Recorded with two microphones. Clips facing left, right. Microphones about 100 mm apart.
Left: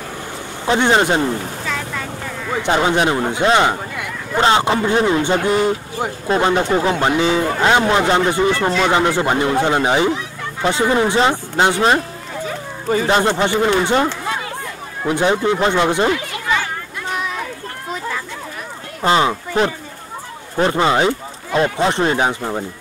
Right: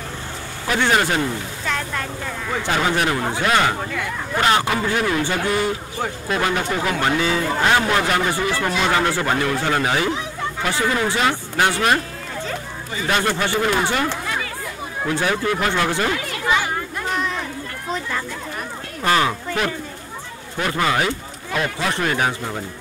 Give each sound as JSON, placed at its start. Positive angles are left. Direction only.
{"t": 0.7, "sound": "a man's voice", "side_deg": 25}
{"t": 2.6, "sound": "a man's voice", "side_deg": 20}
{"t": 6.2, "sound": "a man's voice", "side_deg": 30}
{"t": 13.0, "sound": "a man's voice", "side_deg": 25}
{"t": 17.1, "sound": "a sound", "side_deg": 5}
{"t": 19.0, "sound": "a man's voice", "side_deg": 25}